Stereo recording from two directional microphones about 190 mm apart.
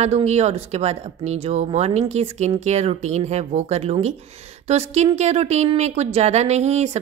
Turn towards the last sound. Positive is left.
turn(degrees=-35)  # may be behind; listen again after turning